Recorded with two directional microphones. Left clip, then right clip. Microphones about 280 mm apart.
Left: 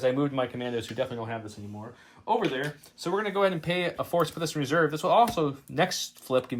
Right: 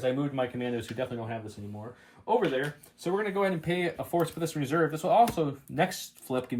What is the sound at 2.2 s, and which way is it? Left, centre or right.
Speech, centre.